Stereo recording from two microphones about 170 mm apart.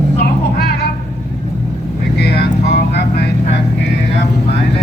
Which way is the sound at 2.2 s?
75° left (ahead or behind).